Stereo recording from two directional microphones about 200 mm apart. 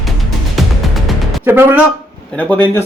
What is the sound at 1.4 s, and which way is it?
Speech, 10° right (ahead or behind).